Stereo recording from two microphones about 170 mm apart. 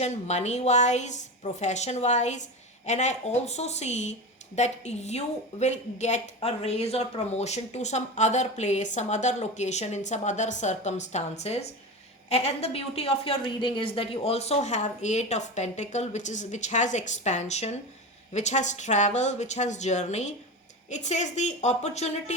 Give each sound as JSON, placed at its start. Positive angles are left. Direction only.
{"t": 0.0, "sound": "a woman's voice", "side_deg": 40}